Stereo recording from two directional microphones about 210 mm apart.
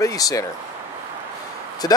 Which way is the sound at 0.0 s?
15° left (ahead or behind).